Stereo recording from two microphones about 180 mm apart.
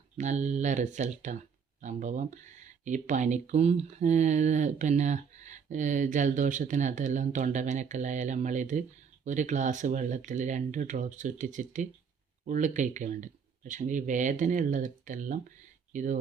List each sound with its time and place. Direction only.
0.2 s speech: 40° right (ahead or behind)